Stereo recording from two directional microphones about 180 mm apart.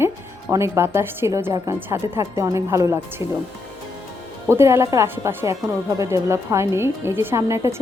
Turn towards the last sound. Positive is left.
turn(degrees=-15)  # may be behind; listen again after turning